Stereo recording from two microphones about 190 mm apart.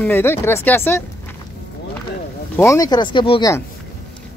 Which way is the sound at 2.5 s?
15° left (ahead or behind).